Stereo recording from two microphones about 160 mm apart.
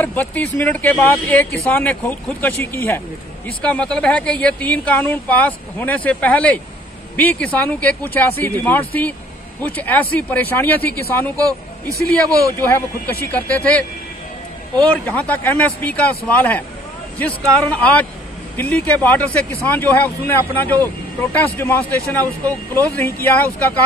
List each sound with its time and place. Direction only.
0.0 s speech: 10° left (ahead or behind)
12.5 s speech: 15° left (ahead or behind)
15.0 s speech: 10° left (ahead or behind)